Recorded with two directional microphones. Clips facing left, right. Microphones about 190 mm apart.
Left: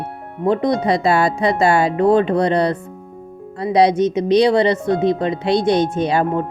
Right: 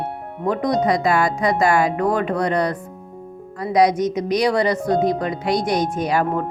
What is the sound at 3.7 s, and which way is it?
Speech, 30° left (ahead or behind).